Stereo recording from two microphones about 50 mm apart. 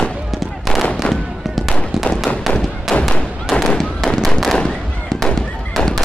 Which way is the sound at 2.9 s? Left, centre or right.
Centre.